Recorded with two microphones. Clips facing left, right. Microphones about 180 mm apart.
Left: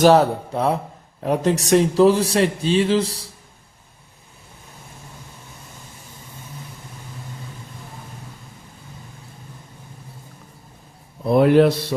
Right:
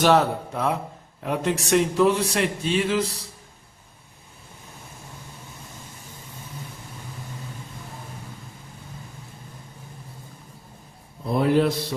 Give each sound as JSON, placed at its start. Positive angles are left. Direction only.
{"t": 0.0, "sound": "a man's voice", "side_deg": 40}
{"t": 11.3, "sound": "speech", "side_deg": 65}